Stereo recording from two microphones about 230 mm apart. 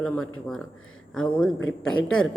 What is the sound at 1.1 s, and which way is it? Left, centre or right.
Speech, centre.